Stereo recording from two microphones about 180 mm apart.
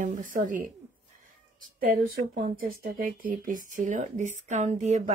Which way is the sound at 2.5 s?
50° right (ahead or behind).